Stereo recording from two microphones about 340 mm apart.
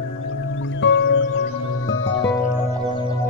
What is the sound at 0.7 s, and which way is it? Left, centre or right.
Music, left.